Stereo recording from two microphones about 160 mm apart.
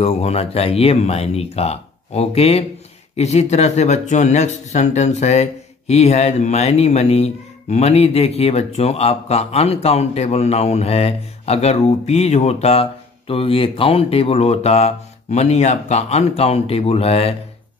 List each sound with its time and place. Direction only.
0.0 s speech: 40° left (ahead or behind)